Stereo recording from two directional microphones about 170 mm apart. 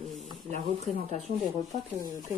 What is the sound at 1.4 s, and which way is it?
Speech, 20° left (ahead or behind).